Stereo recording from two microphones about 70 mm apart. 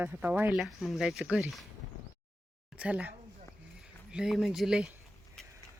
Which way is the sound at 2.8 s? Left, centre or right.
Centre.